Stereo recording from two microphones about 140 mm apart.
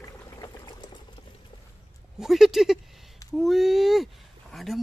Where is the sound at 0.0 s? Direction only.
25° left (ahead or behind).